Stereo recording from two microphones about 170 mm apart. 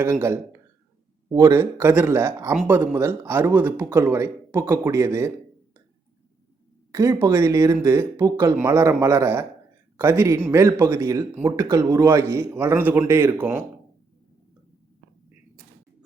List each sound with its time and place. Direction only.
0.0 s speech: 15° right (ahead or behind)
6.9 s speech: 20° right (ahead or behind)